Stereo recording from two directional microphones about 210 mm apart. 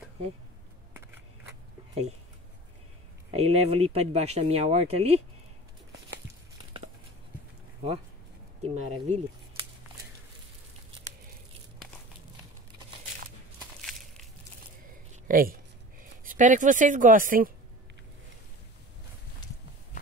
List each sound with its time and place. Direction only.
3.3 s speech: 30° right (ahead or behind)
8.6 s speech: 30° right (ahead or behind)
13.7 s a sound: centre (ahead or behind)
15.2 s speech: 45° right (ahead or behind)